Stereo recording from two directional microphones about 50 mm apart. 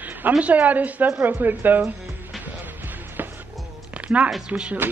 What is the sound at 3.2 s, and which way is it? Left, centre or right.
Music, right.